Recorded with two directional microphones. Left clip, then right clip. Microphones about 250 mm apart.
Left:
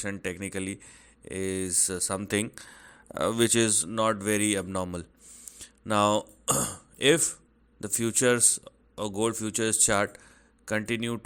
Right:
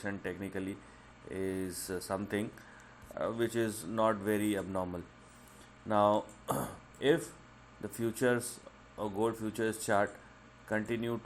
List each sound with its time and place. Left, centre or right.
0.0 s speech: left
3.2 s a man's voice: left